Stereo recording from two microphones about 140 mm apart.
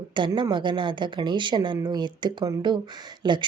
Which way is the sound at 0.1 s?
35° right (ahead or behind).